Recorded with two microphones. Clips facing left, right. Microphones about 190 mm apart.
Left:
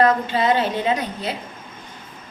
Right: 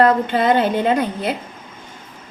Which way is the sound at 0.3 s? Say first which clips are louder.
Right 3 dB; 55° right (ahead or behind).